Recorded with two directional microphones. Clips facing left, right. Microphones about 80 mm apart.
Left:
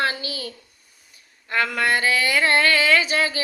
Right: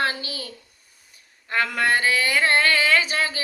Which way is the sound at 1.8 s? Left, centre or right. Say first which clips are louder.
Even; right.